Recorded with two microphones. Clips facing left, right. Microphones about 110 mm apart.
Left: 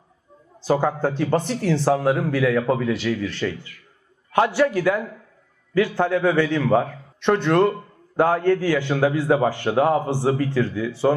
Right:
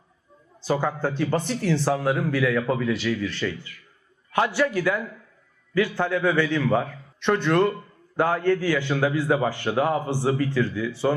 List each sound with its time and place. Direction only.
0.7 s a man's voice: 45° left (ahead or behind)
1.7 s a man's voice: 45° left (ahead or behind)